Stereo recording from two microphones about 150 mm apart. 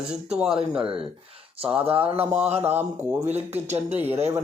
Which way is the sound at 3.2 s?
45° right (ahead or behind).